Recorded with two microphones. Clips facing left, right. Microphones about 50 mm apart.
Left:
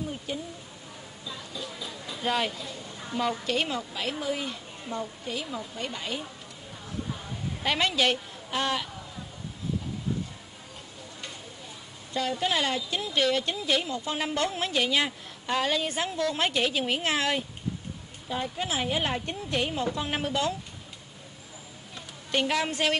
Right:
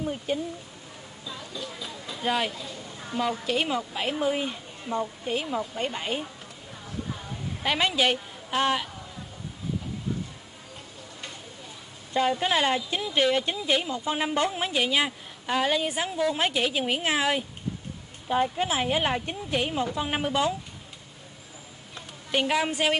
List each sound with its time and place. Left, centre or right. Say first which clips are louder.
0.0 s a sound: right 5 dB; right
1.2 s a sound: right 1 dB; centre
2.1 s speech: right 1 dB; centre
2.6 s a sound: even; centre
3.2 s a woman's voice: right 1 dB; centre
3.9 s a woman's voice: right 4 dB; right
4.9 s a woman's voice: right 5 dB; centre
5.2 s a woman's voice: right 5 dB; right
7.6 s a woman's voice: right 1 dB; centre
8.5 s a woman's voice: right 4 dB; right
12.1 s a woman's voice: right 4 dB; right; by 17.5 s centre
18.3 s a woman's voice: right 6 dB; right; by 20.5 s centre
22.3 s a woman's voice: right 2 dB; centre